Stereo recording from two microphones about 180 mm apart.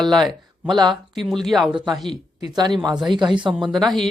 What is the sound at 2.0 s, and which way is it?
Speech, 25° right (ahead or behind).